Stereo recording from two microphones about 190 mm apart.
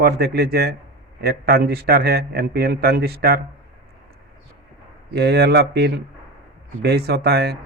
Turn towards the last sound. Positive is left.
turn(degrees=-55)  # may be behind; listen again after turning